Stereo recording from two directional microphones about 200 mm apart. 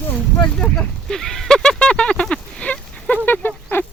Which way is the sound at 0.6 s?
5° left (ahead or behind).